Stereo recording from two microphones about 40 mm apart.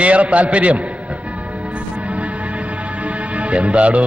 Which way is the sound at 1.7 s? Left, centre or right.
Right.